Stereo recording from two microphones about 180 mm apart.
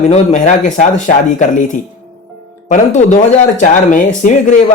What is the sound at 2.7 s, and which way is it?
Speech, 40° left (ahead or behind).